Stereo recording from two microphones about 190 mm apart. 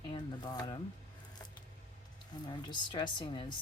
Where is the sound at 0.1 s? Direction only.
20° left (ahead or behind).